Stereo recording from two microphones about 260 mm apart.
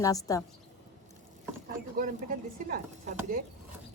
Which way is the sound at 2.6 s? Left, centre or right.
Right.